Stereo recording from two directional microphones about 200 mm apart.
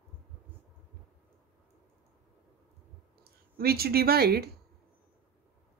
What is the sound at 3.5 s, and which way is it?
Speech, 50° right (ahead or behind).